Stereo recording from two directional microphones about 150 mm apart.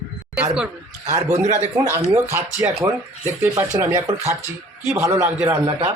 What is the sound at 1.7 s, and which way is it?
Speech, 25° right (ahead or behind).